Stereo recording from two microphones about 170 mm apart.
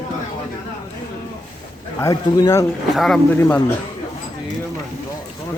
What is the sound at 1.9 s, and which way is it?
Speech, 20° left (ahead or behind).